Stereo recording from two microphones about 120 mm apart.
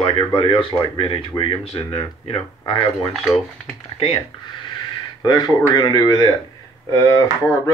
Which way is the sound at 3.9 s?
55° left (ahead or behind).